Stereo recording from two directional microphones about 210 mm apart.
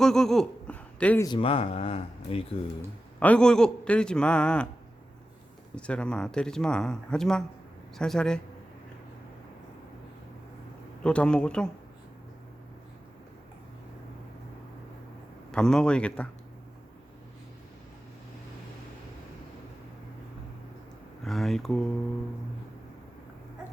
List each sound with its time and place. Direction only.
0.0 s speech: centre (ahead or behind)
1.3 s speech: 25° left (ahead or behind)
3.2 s speech: 5° left (ahead or behind)
5.7 s speech: 5° left (ahead or behind)
11.0 s speech: 5° left (ahead or behind)
15.5 s speech: 5° left (ahead or behind)
21.2 s speech: centre (ahead or behind)